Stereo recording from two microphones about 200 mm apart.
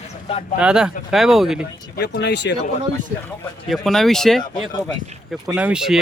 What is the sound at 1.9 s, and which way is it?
Speech, 55° left (ahead or behind).